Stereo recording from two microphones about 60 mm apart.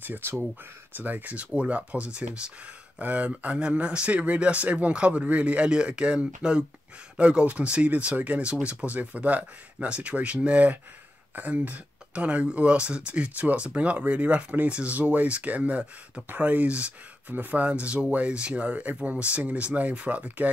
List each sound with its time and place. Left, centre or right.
0.0 s speech: right